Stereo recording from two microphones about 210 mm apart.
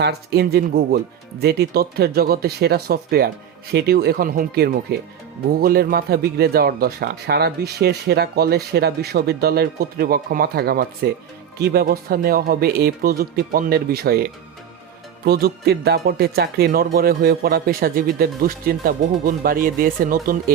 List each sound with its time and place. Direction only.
0.0 s a man's voice: 50° right (ahead or behind)